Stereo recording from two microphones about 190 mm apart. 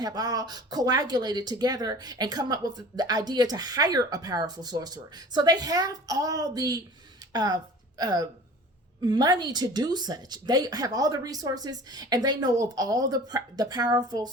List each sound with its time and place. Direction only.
0.0 s speech: 20° right (ahead or behind)